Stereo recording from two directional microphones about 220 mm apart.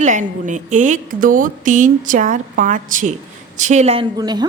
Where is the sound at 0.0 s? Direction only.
35° right (ahead or behind).